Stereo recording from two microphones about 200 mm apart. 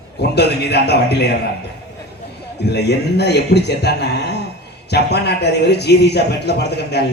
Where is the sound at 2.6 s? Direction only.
55° left (ahead or behind).